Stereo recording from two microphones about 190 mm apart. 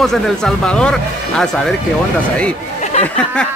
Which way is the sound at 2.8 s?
35° left (ahead or behind).